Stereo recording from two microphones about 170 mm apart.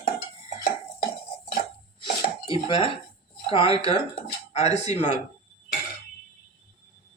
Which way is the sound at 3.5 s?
35° left (ahead or behind).